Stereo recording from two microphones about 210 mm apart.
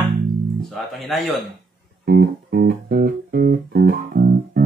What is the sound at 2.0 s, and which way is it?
Music, 50° right (ahead or behind).